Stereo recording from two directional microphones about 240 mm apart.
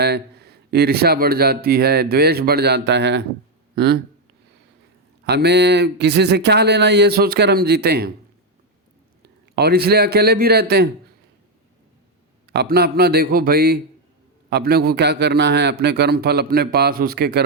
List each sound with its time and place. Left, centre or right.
0.0 s speech: right
5.2 s speech: right
9.2 s a man's voice: right
12.5 s speech: right